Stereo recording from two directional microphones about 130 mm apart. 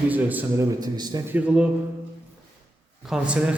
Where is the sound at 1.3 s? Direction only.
10° right (ahead or behind).